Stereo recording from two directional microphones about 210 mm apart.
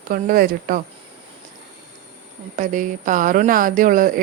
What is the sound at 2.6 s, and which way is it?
Speech, 35° right (ahead or behind).